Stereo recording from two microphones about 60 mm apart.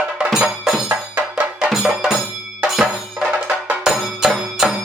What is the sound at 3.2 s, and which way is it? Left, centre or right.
Music, right.